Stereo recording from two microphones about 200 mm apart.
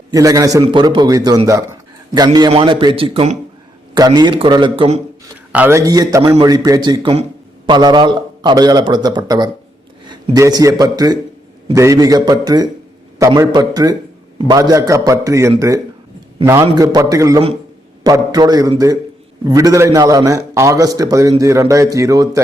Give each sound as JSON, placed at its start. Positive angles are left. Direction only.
{"t": 0.1, "sound": "a man's voice", "side_deg": -15}
{"t": 5.5, "sound": "a man's voice", "side_deg": -10}